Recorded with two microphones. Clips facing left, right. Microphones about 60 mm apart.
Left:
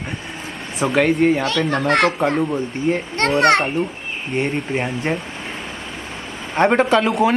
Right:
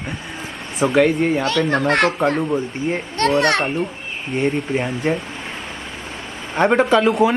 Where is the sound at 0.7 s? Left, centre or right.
Centre.